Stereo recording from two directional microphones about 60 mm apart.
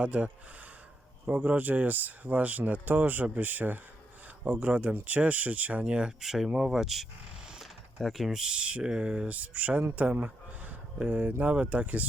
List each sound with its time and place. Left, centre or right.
0.0 s speech: right
1.3 s speech: right
9.9 s a sound: right
11.0 s speech: right